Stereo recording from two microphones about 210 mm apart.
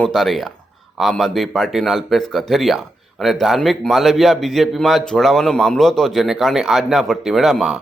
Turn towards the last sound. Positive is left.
turn(degrees=0)  # may be behind; listen again after turning